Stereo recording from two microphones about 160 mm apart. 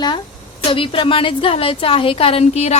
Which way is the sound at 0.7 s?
35° left (ahead or behind).